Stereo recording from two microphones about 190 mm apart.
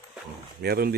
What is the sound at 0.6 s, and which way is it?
Speech, 55° right (ahead or behind).